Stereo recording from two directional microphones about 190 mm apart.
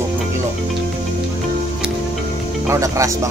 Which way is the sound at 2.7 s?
15° right (ahead or behind).